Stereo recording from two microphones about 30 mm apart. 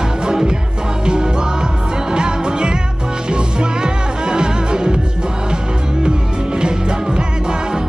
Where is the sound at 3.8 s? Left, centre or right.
Right.